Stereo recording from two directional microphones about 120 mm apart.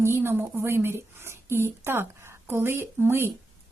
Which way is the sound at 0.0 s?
20° right (ahead or behind).